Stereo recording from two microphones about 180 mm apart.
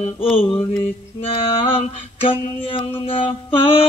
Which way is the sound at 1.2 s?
30° left (ahead or behind).